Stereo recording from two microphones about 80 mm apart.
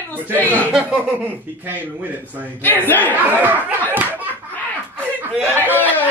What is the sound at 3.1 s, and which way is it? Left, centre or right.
Speech, right.